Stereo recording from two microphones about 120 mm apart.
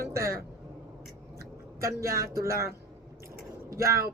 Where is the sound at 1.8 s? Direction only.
25° right (ahead or behind).